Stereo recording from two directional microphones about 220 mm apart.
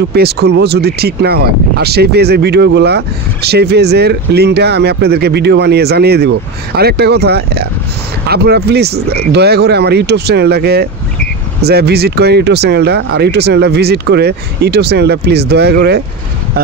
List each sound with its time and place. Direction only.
0.1 s speech: 45° right (ahead or behind)